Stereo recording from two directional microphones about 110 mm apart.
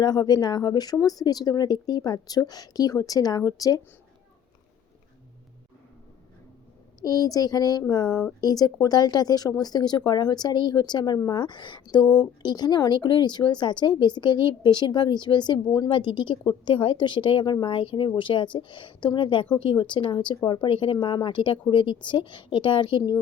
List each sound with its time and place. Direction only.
0.0 s speech: 40° left (ahead or behind)
7.0 s a woman's voice: 35° left (ahead or behind)